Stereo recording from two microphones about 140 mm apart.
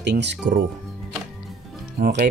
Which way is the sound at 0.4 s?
70° right (ahead or behind).